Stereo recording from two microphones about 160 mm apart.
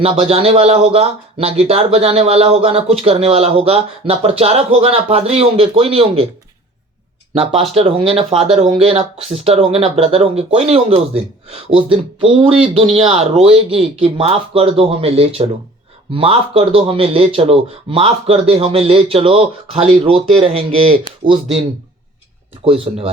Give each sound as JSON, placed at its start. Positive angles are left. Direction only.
{"t": 0.0, "sound": "speech", "side_deg": -40}
{"t": 7.7, "sound": "speech", "side_deg": -35}
{"t": 22.6, "sound": "speech", "side_deg": -35}